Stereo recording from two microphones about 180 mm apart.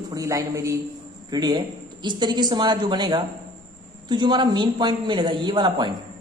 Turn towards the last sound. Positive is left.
turn(degrees=-25)  # may be behind; listen again after turning